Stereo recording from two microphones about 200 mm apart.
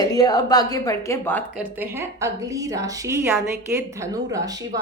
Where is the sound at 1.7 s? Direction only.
10° right (ahead or behind).